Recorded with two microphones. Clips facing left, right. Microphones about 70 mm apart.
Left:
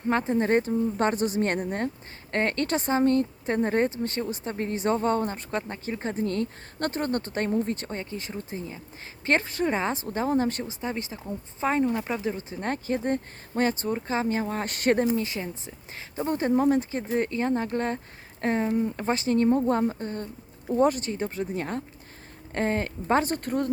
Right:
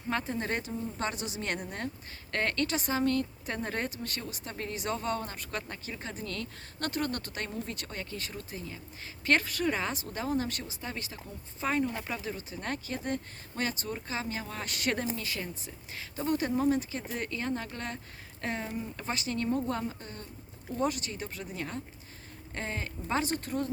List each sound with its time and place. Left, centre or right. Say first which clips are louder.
0.1 s speech: left 9 dB; left